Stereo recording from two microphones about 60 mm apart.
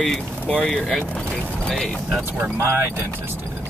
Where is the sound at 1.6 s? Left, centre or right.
Centre.